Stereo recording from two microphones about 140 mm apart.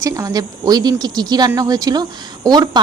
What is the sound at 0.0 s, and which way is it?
A woman's voice, 25° right (ahead or behind).